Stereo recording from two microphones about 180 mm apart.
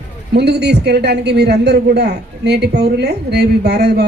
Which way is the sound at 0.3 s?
65° right (ahead or behind).